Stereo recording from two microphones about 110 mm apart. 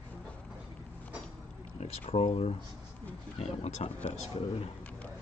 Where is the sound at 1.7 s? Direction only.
70° left (ahead or behind).